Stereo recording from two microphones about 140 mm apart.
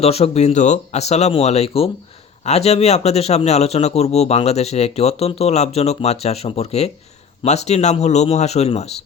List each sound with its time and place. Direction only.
0.0 s speech: 50° left (ahead or behind)